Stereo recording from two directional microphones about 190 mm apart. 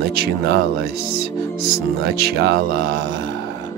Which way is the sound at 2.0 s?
55° right (ahead or behind).